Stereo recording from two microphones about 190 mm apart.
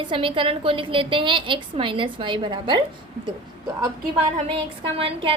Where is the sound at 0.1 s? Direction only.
25° right (ahead or behind).